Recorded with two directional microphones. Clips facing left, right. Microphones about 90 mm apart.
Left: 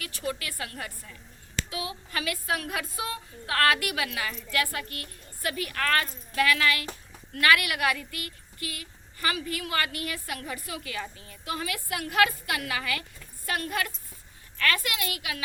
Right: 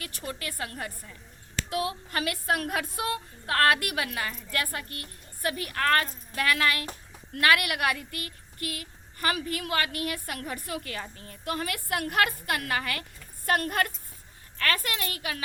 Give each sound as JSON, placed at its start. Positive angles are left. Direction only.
{"t": 0.0, "sound": "a woman's voice", "side_deg": -35}
{"t": 1.7, "sound": "speech", "side_deg": -50}
{"t": 3.5, "sound": "a woman's voice", "side_deg": -40}
{"t": 14.6, "sound": "a woman's voice", "side_deg": -35}